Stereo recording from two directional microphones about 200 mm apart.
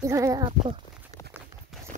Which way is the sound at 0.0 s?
15° right (ahead or behind).